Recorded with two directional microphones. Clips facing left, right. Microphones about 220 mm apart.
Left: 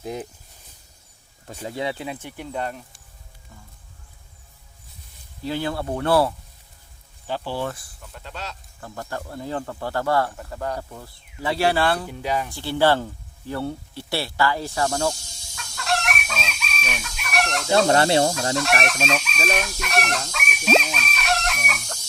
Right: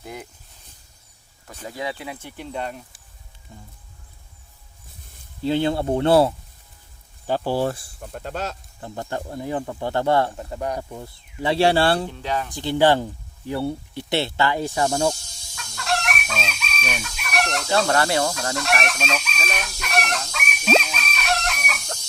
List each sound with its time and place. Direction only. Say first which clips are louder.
0.0 s speech: left 5 dB; 20° left (ahead or behind)
1.5 s speech: left 2 dB; 25° left (ahead or behind)
2.6 s speech: left 1 dB; centre (ahead or behind)
5.4 s speech: right 5 dB; 25° right (ahead or behind)
7.3 s speech: right 5 dB; 45° right (ahead or behind)
8.0 s speech: right 7 dB; 45° right (ahead or behind)
8.8 s speech: right 3 dB; 25° right (ahead or behind)
12.0 s speech: left 1 dB; 10° left (ahead or behind)
12.5 s speech: right 3 dB; 15° right (ahead or behind)
15.5 s chicken: even; centre (ahead or behind)
17.8 s speech: left 3 dB; 25° left (ahead or behind)
18.5 s chicken: left 2 dB; centre (ahead or behind)